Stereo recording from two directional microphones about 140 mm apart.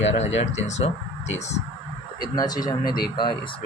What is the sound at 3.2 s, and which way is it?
Speech, 35° left (ahead or behind).